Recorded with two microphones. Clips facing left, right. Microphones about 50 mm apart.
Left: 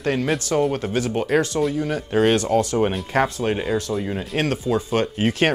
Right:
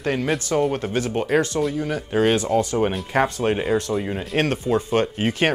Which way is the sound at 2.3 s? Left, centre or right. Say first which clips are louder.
Left 1 dB; centre.